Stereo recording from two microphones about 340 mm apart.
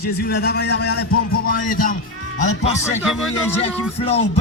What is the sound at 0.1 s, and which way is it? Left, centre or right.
Speech, left.